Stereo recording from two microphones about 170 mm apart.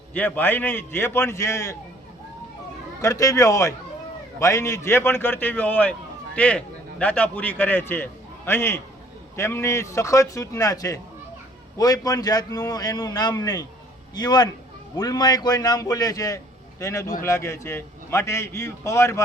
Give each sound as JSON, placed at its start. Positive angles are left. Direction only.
{"t": 0.1, "sound": "a man's voice", "side_deg": 10}
{"t": 3.0, "sound": "a man's voice", "side_deg": 20}